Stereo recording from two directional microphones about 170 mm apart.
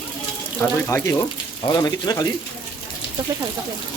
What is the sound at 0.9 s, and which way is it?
A man's voice, 15° left (ahead or behind).